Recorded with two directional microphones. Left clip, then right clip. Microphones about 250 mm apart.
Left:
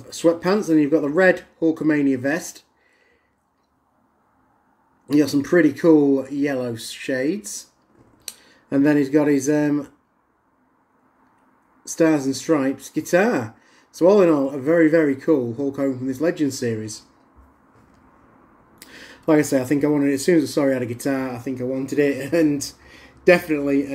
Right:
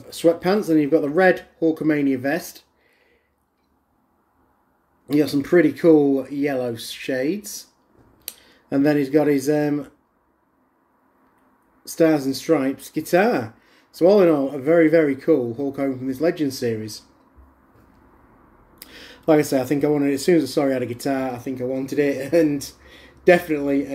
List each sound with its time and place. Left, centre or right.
0.0 s speech: centre
5.0 s speech: centre
11.8 s speech: centre
18.8 s speech: centre
22.8 s a sound: centre